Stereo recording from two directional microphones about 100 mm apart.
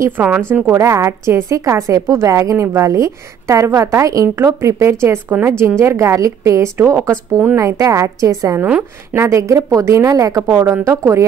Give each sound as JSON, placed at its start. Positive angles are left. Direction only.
{"t": 0.7, "sound": "a woman's voice", "side_deg": -30}
{"t": 10.4, "sound": "a woman's voice", "side_deg": -20}